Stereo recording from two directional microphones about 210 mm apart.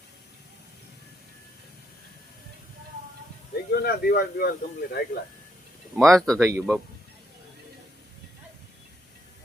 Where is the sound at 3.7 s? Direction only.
50° left (ahead or behind).